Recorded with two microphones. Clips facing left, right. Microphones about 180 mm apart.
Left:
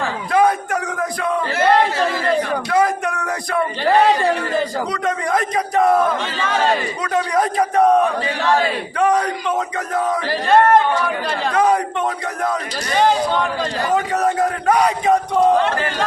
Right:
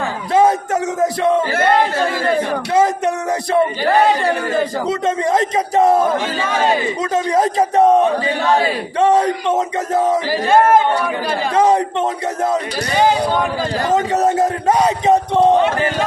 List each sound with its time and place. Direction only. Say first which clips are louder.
0.3 s a sound: right 3 dB; 25° right (ahead or behind)
2.7 s speech: right 3 dB; 25° right (ahead or behind)
4.9 s speech: right 4 dB; 25° right (ahead or behind)
10.2 s speech: right 1 dB; 5° right (ahead or behind)
11.5 s speech: right 3 dB; 25° right (ahead or behind)
13.0 s speech: right 1 dB; 5° right (ahead or behind)
13.9 s speech: right 3 dB; 25° right (ahead or behind)